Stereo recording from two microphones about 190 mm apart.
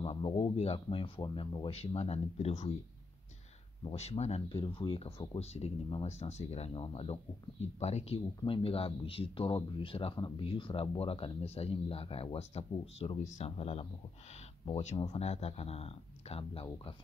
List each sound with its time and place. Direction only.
0.0 s speech: 35° left (ahead or behind)
3.8 s speech: 30° left (ahead or behind)